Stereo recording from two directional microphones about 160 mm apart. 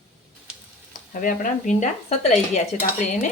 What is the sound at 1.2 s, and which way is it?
Speech, 55° left (ahead or behind).